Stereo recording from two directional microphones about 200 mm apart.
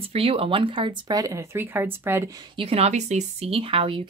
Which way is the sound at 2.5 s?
30° right (ahead or behind).